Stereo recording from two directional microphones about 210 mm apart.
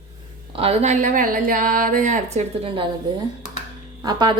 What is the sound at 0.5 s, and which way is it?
Speech, 30° right (ahead or behind).